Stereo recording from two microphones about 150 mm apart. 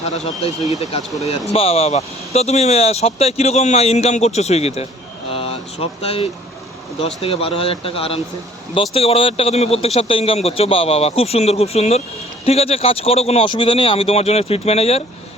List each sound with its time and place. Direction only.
0.0 s speech: 45° left (ahead or behind)
1.5 s speech: 40° left (ahead or behind)